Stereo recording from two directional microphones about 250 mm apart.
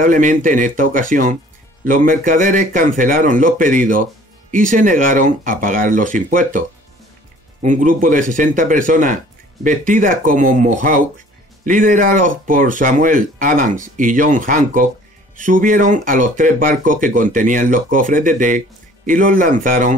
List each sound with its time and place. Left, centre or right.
0.0 s speech: right
7.6 s speech: right